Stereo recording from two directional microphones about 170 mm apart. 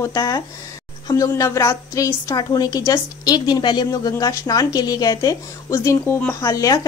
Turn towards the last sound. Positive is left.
turn(degrees=20)  # may be behind; listen again after turning